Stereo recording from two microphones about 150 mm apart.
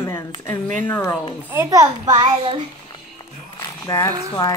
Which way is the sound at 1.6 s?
25° right (ahead or behind).